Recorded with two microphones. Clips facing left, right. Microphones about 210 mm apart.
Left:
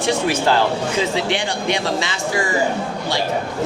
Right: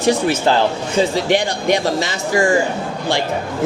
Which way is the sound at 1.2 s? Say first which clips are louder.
Right 5 dB; 45° right (ahead or behind).